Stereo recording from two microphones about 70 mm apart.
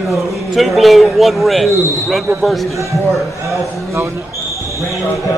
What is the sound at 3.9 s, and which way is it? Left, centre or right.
Speech, right.